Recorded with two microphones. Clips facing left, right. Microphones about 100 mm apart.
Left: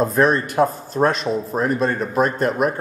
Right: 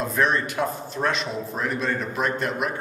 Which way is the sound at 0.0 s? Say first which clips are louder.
Left 6 dB; 40° left (ahead or behind).